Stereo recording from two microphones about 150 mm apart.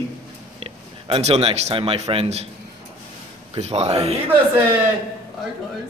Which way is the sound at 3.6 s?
45° right (ahead or behind).